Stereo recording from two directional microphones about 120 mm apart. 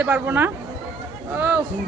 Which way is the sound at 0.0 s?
15° right (ahead or behind).